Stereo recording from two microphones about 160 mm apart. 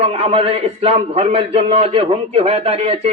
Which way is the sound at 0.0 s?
40° right (ahead or behind).